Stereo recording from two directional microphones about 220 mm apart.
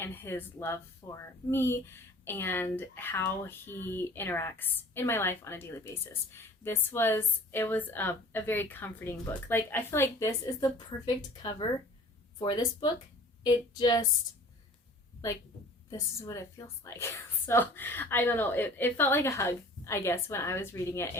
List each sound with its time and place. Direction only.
0.0 s speech: 10° left (ahead or behind)
12.4 s speech: 20° left (ahead or behind)
15.9 s speech: 15° left (ahead or behind)